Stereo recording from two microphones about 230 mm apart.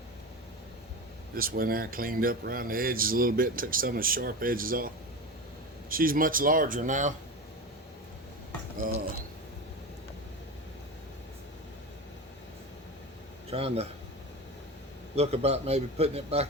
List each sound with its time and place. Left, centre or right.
1.4 s speech: right
5.9 s speech: right
13.5 s a man's voice: right
15.1 s a man's voice: right